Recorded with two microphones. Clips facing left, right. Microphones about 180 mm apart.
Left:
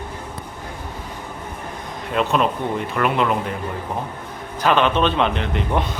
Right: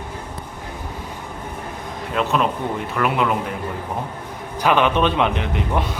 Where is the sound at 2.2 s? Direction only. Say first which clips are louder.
Left 1 dB; centre (ahead or behind).